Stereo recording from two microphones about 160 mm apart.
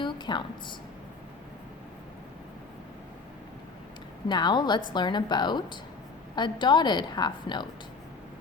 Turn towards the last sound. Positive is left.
turn(degrees=30)  # may be behind; listen again after turning